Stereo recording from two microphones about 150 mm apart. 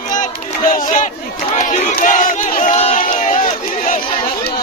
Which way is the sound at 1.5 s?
55° left (ahead or behind).